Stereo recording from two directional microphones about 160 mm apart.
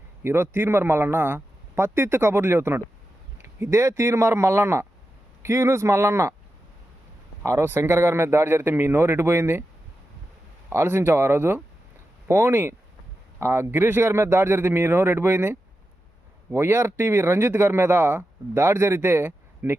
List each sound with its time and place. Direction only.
0.2 s speech: 15° right (ahead or behind)
7.4 s speech: 15° right (ahead or behind)
10.7 s speech: 15° right (ahead or behind)